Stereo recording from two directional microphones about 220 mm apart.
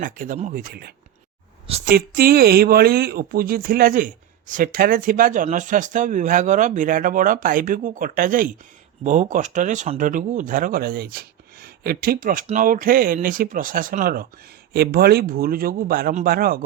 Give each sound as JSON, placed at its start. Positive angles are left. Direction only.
{"t": 0.0, "sound": "speech", "side_deg": -40}
{"t": 1.6, "sound": "a sound", "side_deg": -25}
{"t": 1.9, "sound": "speech", "side_deg": -40}